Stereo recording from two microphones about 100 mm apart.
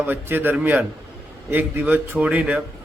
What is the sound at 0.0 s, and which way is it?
A man's voice, 20° right (ahead or behind).